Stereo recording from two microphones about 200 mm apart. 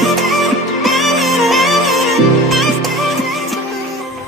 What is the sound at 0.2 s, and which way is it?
Music, centre (ahead or behind).